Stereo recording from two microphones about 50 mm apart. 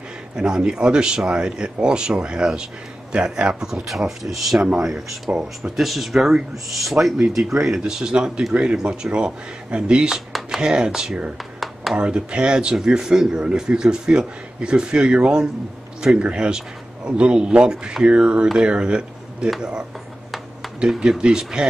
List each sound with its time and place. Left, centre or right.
0.4 s a man's voice: centre
4.2 s a man's voice: centre
21.0 s speech: centre